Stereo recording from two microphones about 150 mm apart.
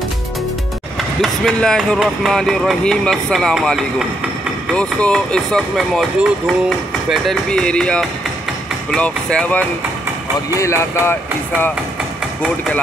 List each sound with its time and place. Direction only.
1.2 s speech: centre (ahead or behind)
10.5 s speech: 20° left (ahead or behind)